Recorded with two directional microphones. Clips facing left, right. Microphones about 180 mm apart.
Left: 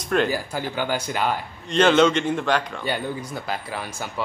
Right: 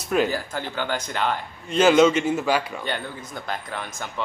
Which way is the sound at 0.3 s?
10° left (ahead or behind).